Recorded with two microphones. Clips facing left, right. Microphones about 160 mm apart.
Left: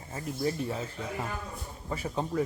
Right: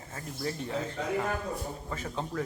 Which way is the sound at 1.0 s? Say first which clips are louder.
Right 5 dB; 85° right.